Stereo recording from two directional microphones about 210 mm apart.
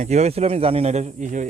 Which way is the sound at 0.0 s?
30° right (ahead or behind).